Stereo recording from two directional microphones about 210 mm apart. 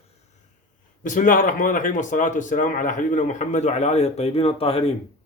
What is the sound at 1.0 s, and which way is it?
A man's voice, 40° left (ahead or behind).